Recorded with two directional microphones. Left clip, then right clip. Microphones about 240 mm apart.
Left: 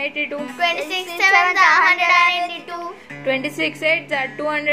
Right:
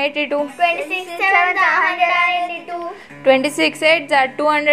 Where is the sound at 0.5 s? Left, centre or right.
Left.